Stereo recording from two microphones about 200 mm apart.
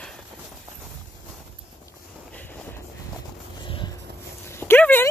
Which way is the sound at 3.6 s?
25° left (ahead or behind).